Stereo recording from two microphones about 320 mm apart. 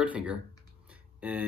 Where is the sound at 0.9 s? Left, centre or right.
Centre.